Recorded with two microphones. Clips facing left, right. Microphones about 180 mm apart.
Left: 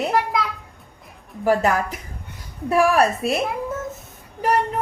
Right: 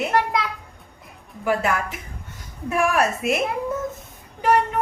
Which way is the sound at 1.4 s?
40° left (ahead or behind).